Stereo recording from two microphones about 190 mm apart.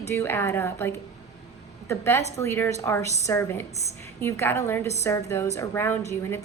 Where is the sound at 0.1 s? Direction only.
10° left (ahead or behind).